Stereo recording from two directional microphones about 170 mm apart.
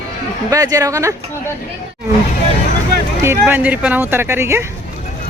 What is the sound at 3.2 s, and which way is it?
Speech, 10° right (ahead or behind).